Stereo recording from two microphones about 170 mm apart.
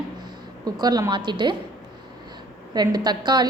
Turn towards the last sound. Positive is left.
turn(degrees=-25)  # may be behind; listen again after turning